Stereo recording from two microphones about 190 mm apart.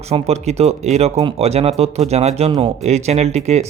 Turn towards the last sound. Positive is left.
turn(degrees=-35)  # may be behind; listen again after turning